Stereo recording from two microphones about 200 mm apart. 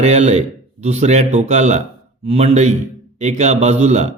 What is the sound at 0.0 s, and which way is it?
A man's voice, 30° right (ahead or behind).